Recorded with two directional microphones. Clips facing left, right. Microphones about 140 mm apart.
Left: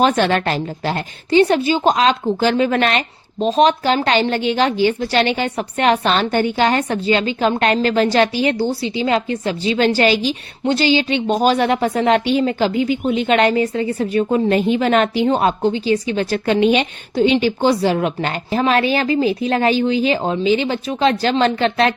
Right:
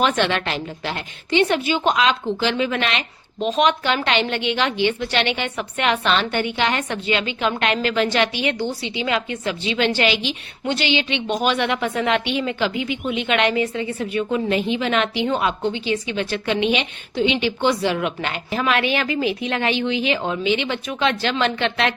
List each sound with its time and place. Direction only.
0.0 s a woman's voice: 40° left (ahead or behind)